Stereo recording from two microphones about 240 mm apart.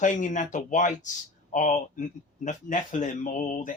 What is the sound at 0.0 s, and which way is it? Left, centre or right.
Speech, left.